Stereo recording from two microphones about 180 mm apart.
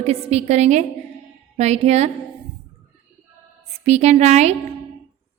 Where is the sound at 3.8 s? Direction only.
35° right (ahead or behind).